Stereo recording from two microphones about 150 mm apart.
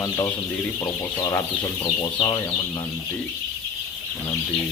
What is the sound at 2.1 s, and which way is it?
Speech, 25° left (ahead or behind).